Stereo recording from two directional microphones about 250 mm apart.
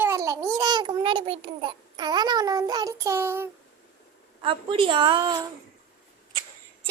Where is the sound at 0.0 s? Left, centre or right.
Centre.